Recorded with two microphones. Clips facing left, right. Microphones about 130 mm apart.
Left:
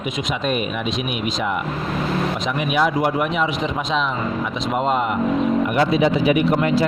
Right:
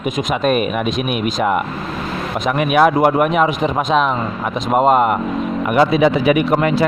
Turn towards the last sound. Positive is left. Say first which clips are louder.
# right 3 dB
turn(degrees=-60)  # may be behind; listen again after turning